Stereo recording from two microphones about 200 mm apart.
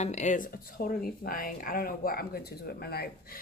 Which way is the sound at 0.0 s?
35° left (ahead or behind).